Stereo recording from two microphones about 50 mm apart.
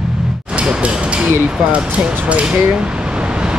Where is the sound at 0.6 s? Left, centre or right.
Right.